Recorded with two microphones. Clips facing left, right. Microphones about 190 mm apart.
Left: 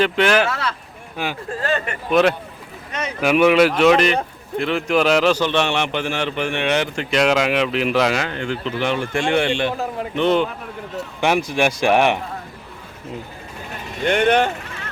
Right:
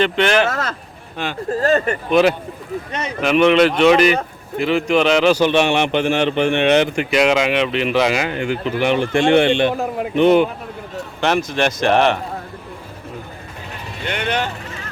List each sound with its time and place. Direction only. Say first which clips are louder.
0.0 s speech: right 1 dB; 5° left (ahead or behind)
0.5 s speech: right 2 dB; 45° right (ahead or behind)
1.1 s speech: even; 10° left (ahead or behind)
1.5 s speech: right 9 dB; 40° right (ahead or behind)
2.0 s speech: even; centre (ahead or behind)
5.3 s a man's voice: right 4 dB; 15° right (ahead or behind)
7.2 s a man's voice: right 1 dB; centre (ahead or behind)
11.2 s speech: even; 15° left (ahead or behind)
14.0 s speech: left 6 dB; 50° left (ahead or behind)